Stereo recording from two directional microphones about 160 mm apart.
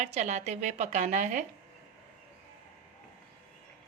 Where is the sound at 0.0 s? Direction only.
45° right (ahead or behind).